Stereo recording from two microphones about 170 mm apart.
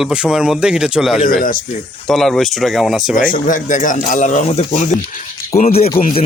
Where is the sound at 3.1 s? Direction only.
55° left (ahead or behind).